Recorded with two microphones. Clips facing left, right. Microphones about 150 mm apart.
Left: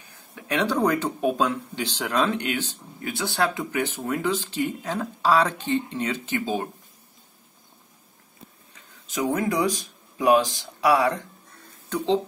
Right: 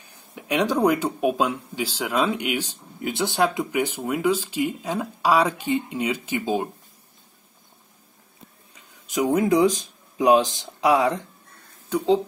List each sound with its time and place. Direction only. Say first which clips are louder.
0.3 s speech: right 2 dB; 15° right (ahead or behind)
9.0 s speech: right 4 dB; 15° right (ahead or behind)